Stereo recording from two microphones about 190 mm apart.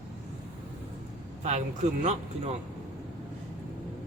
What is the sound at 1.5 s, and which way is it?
Speech, 35° right (ahead or behind).